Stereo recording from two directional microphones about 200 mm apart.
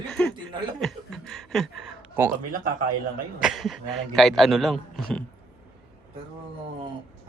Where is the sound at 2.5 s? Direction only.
45° right (ahead or behind).